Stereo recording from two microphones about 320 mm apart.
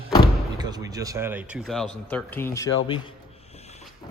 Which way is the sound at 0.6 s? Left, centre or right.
Centre.